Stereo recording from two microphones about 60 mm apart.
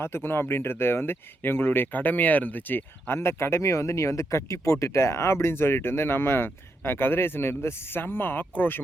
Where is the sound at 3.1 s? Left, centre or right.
Left.